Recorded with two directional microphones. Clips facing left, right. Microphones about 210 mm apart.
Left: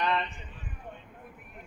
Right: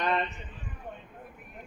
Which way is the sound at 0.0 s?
40° right (ahead or behind).